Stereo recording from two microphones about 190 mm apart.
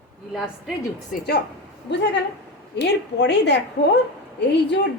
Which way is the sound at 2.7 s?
65° left (ahead or behind).